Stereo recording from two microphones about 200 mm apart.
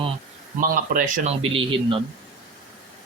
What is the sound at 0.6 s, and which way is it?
Speech, 40° right (ahead or behind).